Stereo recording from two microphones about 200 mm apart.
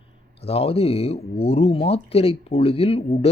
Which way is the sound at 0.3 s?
30° left (ahead or behind).